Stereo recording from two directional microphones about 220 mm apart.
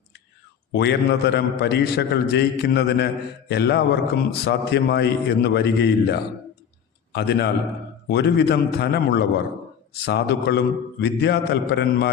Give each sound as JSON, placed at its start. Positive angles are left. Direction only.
{"t": 0.7, "sound": "a man's voice", "side_deg": 50}